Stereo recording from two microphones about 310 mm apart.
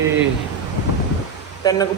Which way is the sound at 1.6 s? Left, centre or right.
Centre.